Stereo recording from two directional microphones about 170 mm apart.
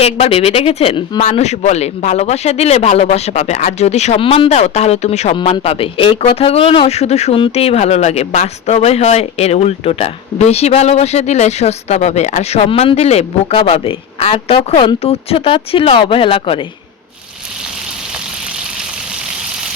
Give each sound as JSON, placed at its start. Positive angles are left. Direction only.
{"t": 0.0, "sound": "speech", "side_deg": 35}
{"t": 1.2, "sound": "speech", "side_deg": 40}